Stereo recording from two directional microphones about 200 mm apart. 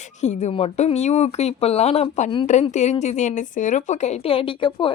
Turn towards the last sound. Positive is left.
turn(degrees=25)  # may be behind; listen again after turning